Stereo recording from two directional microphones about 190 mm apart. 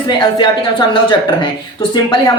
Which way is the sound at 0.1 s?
25° left (ahead or behind).